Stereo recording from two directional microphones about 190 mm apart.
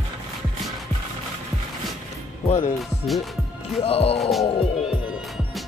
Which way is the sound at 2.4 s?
35° left (ahead or behind).